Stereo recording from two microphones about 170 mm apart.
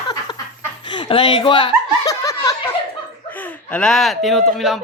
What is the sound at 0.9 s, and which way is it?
Laughter, 30° left (ahead or behind).